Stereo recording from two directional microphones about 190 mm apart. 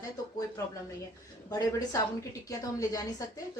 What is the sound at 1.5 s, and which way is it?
A woman's voice, 20° left (ahead or behind).